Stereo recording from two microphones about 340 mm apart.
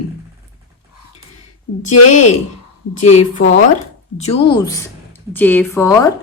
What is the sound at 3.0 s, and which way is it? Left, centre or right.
A woman's voice, centre.